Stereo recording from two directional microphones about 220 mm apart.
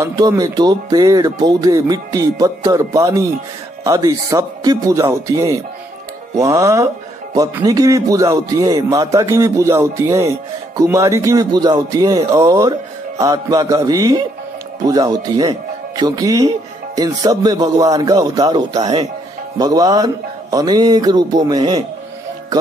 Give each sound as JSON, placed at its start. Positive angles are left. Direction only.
{"t": 0.0, "sound": "speech", "side_deg": -15}